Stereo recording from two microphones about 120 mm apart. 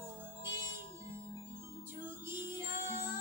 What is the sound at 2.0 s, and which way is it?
Music, 20° right (ahead or behind).